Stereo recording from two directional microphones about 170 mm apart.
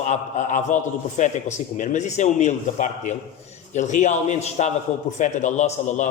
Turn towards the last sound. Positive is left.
turn(degrees=45)  # may be behind; listen again after turning